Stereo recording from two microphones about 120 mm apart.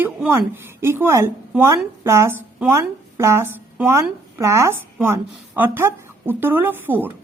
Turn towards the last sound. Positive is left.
turn(degrees=-15)  # may be behind; listen again after turning